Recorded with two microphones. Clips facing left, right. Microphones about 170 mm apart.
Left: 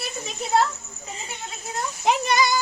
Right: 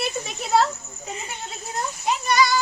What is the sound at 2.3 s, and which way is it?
Speech, 20° left (ahead or behind).